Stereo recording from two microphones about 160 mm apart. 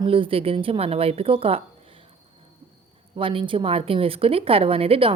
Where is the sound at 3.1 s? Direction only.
35° right (ahead or behind).